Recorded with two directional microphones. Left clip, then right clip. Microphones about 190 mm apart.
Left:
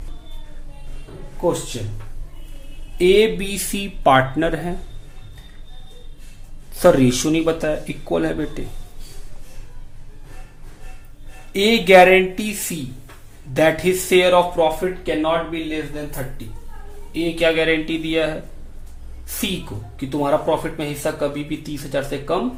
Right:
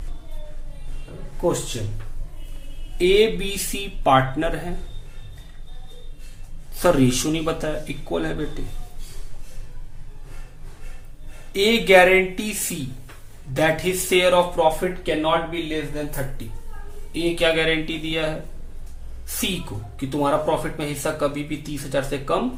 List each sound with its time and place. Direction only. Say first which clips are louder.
3.0 s speech: left 3 dB; 25° left (ahead or behind)
6.7 s speech: left 4 dB; 25° left (ahead or behind)
11.5 s speech: left 3 dB; 20° left (ahead or behind)
14.8 s speech: left 2 dB; 5° left (ahead or behind); by 18.3 s 20° left (ahead or behind)
20.0 s speech: left 2 dB; 10° left (ahead or behind)